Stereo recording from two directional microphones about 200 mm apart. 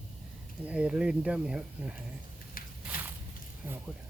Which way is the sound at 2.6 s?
45° left (ahead or behind).